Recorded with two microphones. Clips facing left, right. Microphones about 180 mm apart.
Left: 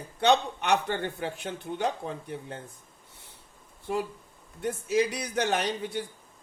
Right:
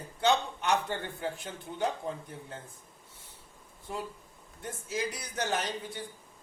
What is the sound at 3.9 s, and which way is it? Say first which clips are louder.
A man's voice: left 8 dB; 70° left (ahead or behind).